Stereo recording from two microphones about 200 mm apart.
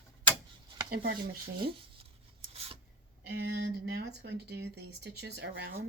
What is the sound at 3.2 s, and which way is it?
Speech, 55° right (ahead or behind).